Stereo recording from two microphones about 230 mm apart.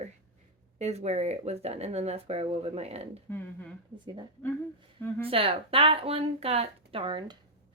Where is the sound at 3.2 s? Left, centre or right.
Centre.